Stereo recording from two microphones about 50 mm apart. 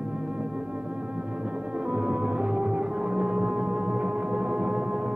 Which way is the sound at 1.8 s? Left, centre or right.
Centre.